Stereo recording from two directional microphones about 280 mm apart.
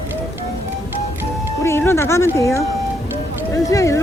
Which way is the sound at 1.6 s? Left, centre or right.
Centre.